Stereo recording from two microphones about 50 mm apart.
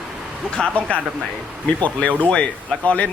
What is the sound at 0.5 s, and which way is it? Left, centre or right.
Speech, centre.